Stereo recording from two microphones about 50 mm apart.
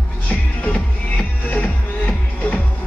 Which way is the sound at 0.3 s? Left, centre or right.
Left.